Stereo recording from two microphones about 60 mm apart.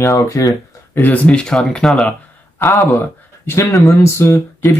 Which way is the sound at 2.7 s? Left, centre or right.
Left.